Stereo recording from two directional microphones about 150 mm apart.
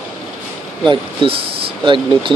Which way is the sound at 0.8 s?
35° right (ahead or behind).